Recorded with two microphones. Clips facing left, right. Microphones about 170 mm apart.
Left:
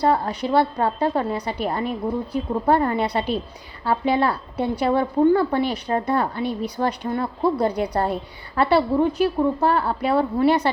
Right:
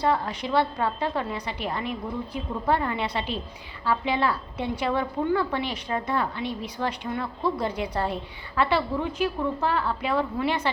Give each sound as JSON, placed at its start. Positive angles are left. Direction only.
{"t": 0.0, "sound": "a woman's voice", "side_deg": 35}